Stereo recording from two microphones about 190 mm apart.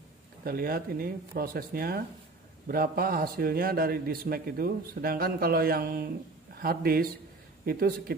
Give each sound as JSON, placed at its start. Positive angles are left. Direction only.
{"t": 0.4, "sound": "a man's voice", "side_deg": -50}